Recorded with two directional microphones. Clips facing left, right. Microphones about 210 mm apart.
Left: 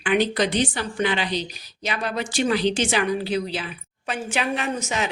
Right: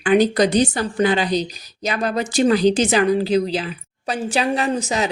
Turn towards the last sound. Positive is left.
turn(degrees=-35)  # may be behind; listen again after turning